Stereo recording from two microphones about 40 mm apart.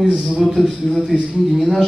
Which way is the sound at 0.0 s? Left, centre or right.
Centre.